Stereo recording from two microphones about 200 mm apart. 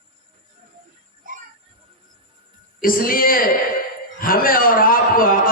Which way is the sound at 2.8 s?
45° left (ahead or behind).